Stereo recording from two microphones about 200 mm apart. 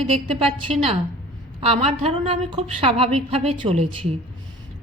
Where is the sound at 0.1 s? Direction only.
30° right (ahead or behind).